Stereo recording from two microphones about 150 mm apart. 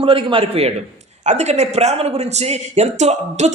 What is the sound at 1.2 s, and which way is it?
Speech, 50° right (ahead or behind).